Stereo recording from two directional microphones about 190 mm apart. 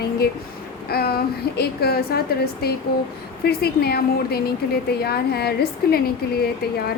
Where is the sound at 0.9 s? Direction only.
55° left (ahead or behind).